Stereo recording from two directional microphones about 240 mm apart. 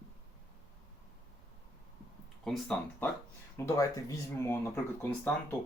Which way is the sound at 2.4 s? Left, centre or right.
Centre.